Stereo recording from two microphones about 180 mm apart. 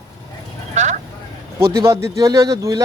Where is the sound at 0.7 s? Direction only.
40° right (ahead or behind).